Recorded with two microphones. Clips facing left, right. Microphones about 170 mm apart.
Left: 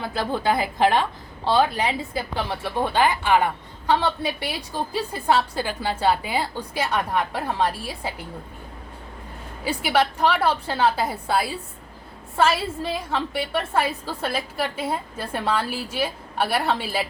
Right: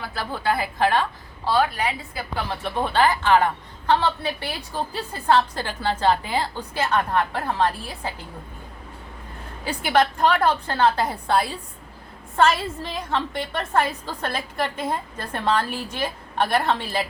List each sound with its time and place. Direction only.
0.0 s a woman's voice: 20° left (ahead or behind)
2.5 s a woman's voice: 15° left (ahead or behind)
9.6 s a woman's voice: 5° left (ahead or behind)